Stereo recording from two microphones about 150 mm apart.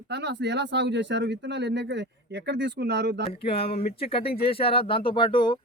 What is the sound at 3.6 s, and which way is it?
Speech, 40° left (ahead or behind).